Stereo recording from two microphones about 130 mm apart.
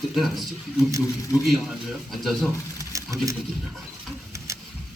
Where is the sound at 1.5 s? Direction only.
Centre (ahead or behind).